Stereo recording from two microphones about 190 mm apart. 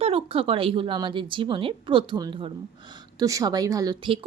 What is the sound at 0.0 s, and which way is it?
A woman's voice, 30° right (ahead or behind).